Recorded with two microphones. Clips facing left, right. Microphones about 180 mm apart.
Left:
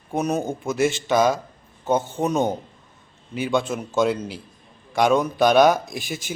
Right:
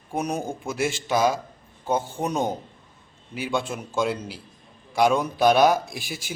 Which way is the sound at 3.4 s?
10° right (ahead or behind).